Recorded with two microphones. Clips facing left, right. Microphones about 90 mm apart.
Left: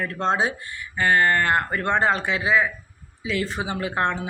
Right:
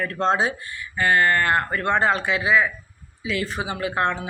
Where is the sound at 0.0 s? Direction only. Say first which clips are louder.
Right 1 dB; 20° left (ahead or behind).